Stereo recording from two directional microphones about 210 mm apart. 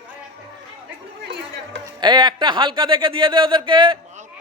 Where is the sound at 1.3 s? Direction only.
55° right (ahead or behind).